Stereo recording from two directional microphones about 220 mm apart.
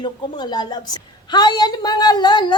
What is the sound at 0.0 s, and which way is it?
A woman's voice, 20° left (ahead or behind).